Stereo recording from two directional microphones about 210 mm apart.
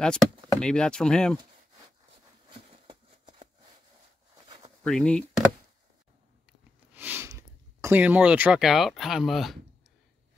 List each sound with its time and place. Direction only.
0.0 s speech: 5° left (ahead or behind)
2.7 s a sound: 25° right (ahead or behind)
4.8 s speech: 5° left (ahead or behind)
6.9 s speech: 10° right (ahead or behind)